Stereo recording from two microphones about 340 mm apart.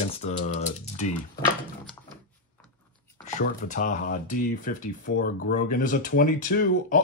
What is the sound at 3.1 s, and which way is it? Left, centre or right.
Speech, left.